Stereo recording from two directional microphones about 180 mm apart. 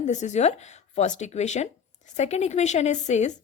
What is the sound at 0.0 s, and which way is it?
A woman's voice, 40° left (ahead or behind).